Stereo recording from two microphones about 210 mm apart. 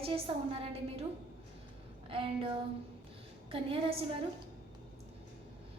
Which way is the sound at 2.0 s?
25° right (ahead or behind).